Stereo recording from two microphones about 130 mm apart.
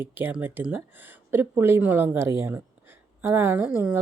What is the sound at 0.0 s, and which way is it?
Speech, 15° right (ahead or behind).